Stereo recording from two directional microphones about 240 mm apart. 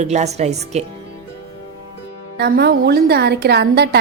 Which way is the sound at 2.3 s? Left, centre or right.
Right.